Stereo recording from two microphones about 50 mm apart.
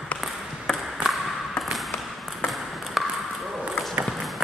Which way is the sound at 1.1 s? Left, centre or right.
Centre.